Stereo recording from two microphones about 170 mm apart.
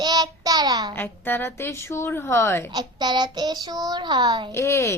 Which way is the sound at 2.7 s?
25° right (ahead or behind).